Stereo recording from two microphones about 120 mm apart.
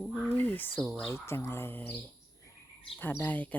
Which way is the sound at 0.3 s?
15° left (ahead or behind).